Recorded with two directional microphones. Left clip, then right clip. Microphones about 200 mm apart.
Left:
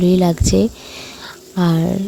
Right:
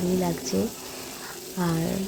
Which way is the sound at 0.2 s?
50° left (ahead or behind).